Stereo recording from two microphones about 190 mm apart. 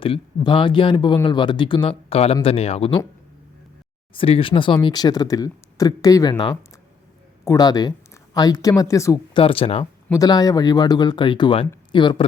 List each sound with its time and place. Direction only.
0.0 s speech: 30° left (ahead or behind)
4.1 s speech: 30° left (ahead or behind)
9.4 s speech: 30° left (ahead or behind)